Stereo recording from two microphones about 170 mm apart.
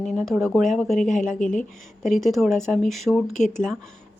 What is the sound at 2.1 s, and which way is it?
Speech, centre (ahead or behind).